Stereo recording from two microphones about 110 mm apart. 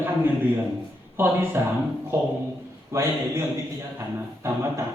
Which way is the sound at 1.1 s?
20° right (ahead or behind).